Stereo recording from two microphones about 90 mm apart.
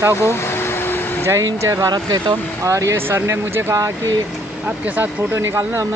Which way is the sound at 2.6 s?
35° right (ahead or behind).